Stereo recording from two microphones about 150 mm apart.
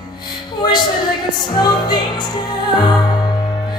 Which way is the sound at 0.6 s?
30° left (ahead or behind).